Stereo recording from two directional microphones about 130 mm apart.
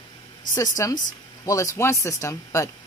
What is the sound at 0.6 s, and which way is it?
Speech, 25° left (ahead or behind).